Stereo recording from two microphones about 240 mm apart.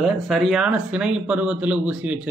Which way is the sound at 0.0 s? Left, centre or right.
Centre.